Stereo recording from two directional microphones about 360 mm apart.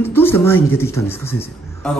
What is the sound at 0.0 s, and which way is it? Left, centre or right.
A man's voice, centre.